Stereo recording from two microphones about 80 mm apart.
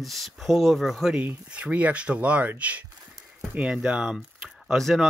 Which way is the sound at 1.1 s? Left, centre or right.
Centre.